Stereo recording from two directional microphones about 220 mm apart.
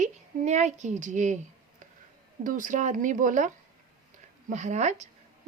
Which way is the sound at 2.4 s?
35° right (ahead or behind).